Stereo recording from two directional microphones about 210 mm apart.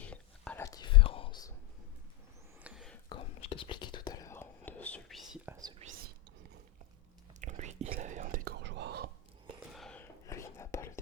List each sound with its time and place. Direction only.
0.0 s whispering: 5° left (ahead or behind)
2.6 s whispering: centre (ahead or behind)
3.1 s whispering: 25° left (ahead or behind); by 5.5 s centre (ahead or behind)
5.8 s whispering: 30° right (ahead or behind)
7.4 s whispering: 35° right (ahead or behind); by 9.0 s 55° right (ahead or behind)
9.7 s whispering: 5° left (ahead or behind)